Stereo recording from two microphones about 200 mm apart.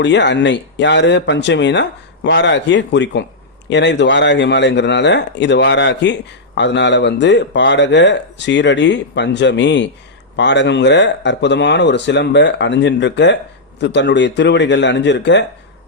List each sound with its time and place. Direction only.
0.0 s speech: 60° left (ahead or behind)